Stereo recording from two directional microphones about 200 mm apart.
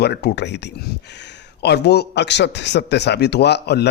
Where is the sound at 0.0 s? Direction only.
55° left (ahead or behind).